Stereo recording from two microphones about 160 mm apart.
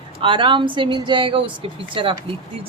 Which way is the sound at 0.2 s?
30° right (ahead or behind).